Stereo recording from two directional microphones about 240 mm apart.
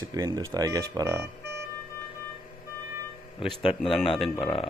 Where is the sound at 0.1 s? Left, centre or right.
Centre.